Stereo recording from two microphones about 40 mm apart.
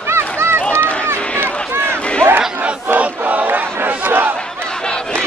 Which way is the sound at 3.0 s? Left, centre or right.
Right.